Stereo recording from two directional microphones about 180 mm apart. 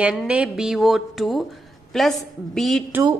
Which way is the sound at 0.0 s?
5° right (ahead or behind).